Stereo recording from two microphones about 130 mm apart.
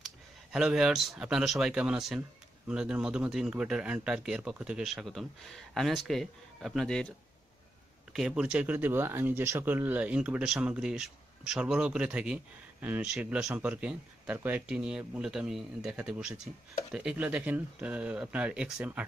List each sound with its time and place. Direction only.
0.0 s speech: 5° right (ahead or behind)